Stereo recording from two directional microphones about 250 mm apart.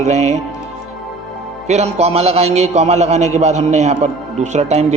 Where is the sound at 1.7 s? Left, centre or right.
Right.